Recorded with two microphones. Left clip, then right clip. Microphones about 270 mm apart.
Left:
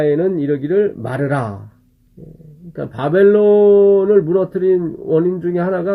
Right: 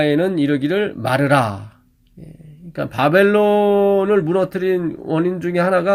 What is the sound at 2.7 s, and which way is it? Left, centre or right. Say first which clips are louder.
Speech: right 2 dB; right.